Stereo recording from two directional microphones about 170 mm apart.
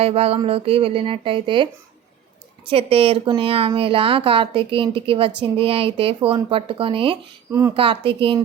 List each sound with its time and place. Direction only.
0.0 s a woman's voice: 35° right (ahead or behind)